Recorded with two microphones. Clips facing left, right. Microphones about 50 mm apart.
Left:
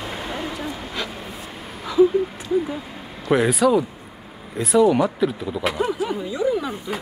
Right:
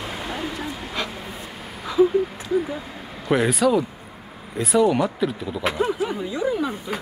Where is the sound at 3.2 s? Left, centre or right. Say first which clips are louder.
Left 2 dB; centre.